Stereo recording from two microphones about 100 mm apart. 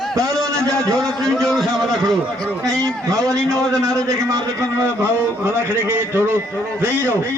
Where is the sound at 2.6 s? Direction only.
35° right (ahead or behind); by 6.0 s 20° right (ahead or behind).